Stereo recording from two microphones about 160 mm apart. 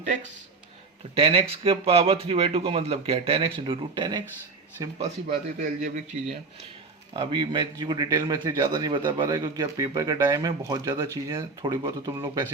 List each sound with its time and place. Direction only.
1.1 s a man's voice: 35° right (ahead or behind)
5.5 s a man's voice: 50° right (ahead or behind)
7.1 s a man's voice: 30° right (ahead or behind)